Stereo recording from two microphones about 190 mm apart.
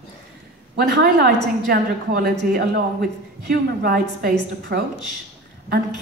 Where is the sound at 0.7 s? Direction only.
55° right (ahead or behind).